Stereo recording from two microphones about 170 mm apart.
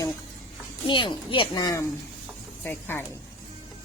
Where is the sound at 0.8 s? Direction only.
30° left (ahead or behind); by 3.0 s 10° left (ahead or behind).